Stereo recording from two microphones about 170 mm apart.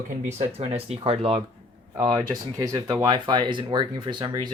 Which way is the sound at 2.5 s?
20° right (ahead or behind).